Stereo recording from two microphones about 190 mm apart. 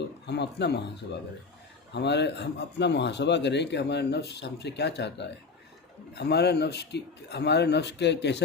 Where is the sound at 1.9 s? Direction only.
65° left (ahead or behind).